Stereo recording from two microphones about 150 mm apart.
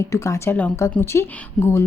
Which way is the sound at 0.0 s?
20° left (ahead or behind).